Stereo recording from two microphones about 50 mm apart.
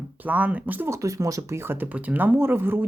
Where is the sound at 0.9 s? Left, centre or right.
Right.